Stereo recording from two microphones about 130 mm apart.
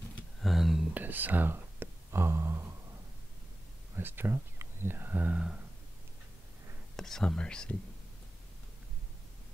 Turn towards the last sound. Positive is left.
turn(degrees=5)  # may be behind; listen again after turning